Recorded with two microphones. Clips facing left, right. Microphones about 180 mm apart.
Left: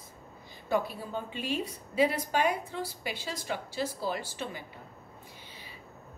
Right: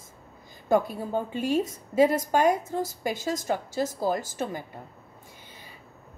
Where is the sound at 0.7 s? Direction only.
45° right (ahead or behind).